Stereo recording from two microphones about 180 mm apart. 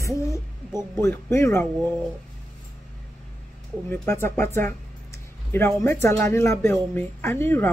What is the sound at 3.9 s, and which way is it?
Speech, 15° left (ahead or behind).